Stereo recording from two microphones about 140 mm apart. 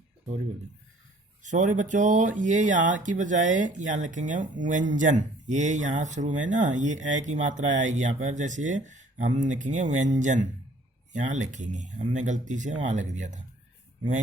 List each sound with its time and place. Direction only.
1.4 s speech: 65° right (ahead or behind)